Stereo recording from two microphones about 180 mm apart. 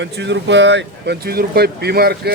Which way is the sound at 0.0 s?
80° right.